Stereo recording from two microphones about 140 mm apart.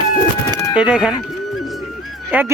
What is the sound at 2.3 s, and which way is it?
Speech, 15° right (ahead or behind).